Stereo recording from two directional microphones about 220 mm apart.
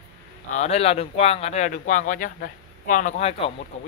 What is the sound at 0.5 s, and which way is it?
Speech, 30° left (ahead or behind).